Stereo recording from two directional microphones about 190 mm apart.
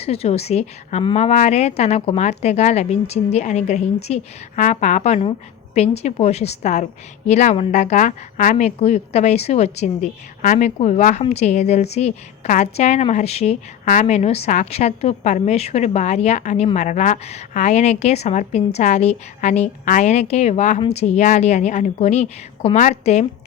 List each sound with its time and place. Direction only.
0.0 s a woman's voice: 35° left (ahead or behind)